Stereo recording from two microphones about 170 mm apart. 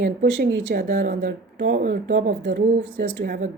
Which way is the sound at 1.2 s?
90° right.